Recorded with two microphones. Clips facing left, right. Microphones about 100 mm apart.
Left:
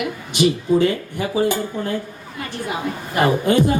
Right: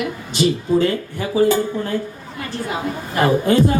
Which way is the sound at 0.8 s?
20° left (ahead or behind).